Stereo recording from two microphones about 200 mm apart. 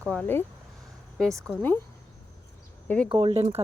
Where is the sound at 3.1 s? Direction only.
25° right (ahead or behind).